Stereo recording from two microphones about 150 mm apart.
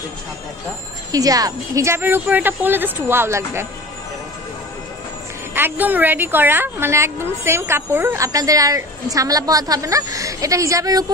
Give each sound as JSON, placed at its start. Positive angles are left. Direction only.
{"t": 1.1, "sound": "a woman's voice", "side_deg": -25}
{"t": 5.5, "sound": "a woman's voice", "side_deg": -15}